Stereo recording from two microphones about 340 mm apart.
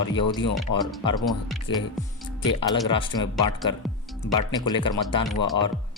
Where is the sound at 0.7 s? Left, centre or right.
Left.